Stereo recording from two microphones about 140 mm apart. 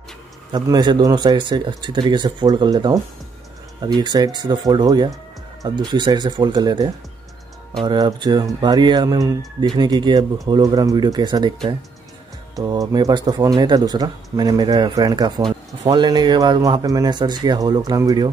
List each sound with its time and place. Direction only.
0.5 s speech: 30° right (ahead or behind)